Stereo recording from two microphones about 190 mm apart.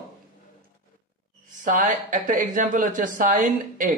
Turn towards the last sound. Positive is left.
turn(degrees=-45)  # may be behind; listen again after turning